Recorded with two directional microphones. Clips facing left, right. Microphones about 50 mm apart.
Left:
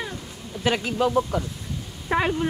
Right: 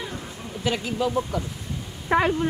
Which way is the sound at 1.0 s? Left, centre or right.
Left.